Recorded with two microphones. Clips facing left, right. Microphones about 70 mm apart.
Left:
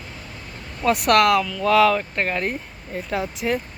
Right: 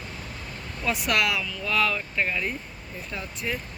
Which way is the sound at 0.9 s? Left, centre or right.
Left.